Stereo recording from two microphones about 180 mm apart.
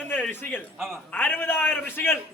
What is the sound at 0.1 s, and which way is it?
A man's voice, 10° left (ahead or behind).